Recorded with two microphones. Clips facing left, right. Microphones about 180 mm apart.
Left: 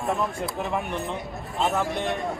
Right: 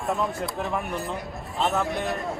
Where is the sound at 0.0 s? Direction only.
Centre (ahead or behind).